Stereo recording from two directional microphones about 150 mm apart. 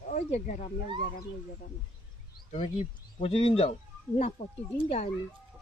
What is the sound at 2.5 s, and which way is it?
Speech, 40° left (ahead or behind).